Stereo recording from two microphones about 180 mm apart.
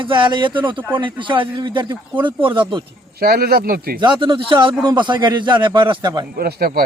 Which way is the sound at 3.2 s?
60° right (ahead or behind).